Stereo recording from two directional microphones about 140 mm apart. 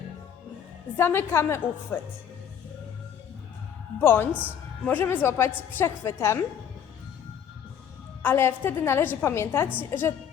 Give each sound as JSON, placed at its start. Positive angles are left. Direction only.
{"t": 0.9, "sound": "a woman's voice", "side_deg": 15}
{"t": 4.0, "sound": "a woman's voice", "side_deg": 15}
{"t": 8.2, "sound": "a woman's voice", "side_deg": 15}